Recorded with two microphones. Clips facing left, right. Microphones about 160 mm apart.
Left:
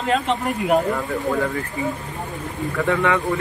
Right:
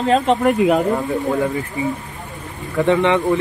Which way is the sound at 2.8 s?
25° right (ahead or behind).